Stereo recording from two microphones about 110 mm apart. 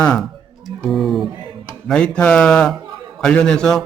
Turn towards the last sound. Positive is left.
turn(degrees=5)  # may be behind; listen again after turning